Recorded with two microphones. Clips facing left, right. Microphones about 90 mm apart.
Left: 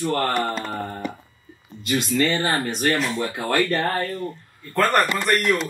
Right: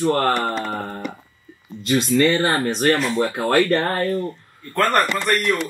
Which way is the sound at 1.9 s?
45° right (ahead or behind).